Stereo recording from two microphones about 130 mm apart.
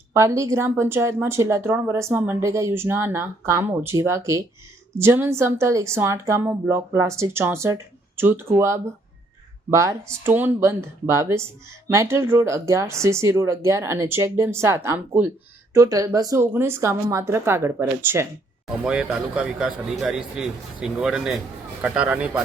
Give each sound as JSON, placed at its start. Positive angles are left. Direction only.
{"t": 0.1, "sound": "a woman's voice", "side_deg": -25}
{"t": 18.8, "sound": "a man's voice", "side_deg": -5}